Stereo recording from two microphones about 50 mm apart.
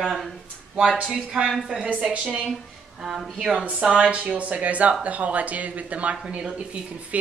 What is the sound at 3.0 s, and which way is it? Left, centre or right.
Speech, centre.